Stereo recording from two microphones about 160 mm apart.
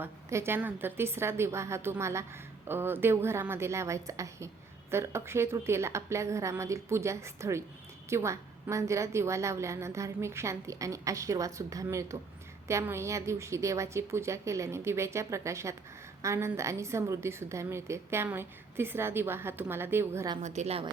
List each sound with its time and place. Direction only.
0.0 s a woman's voice: 15° right (ahead or behind)
20.4 s speech: 45° right (ahead or behind)